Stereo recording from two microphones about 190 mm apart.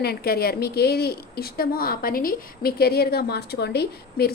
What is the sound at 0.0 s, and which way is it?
A woman's voice, 55° left (ahead or behind).